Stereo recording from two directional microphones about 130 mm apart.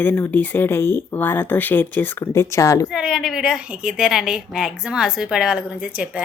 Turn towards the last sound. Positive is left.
turn(degrees=-10)  # may be behind; listen again after turning